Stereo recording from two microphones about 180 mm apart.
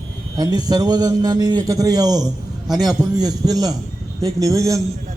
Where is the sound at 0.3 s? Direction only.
20° right (ahead or behind).